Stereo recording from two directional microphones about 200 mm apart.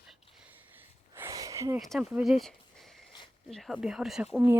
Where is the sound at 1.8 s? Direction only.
Centre (ahead or behind).